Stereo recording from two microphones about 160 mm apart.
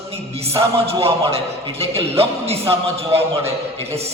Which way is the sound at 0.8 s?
35° right (ahead or behind).